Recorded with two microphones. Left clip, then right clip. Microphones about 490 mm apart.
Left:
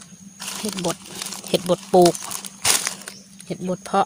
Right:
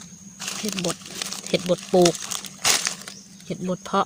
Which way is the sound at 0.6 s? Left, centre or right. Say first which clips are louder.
Left 2 dB; right.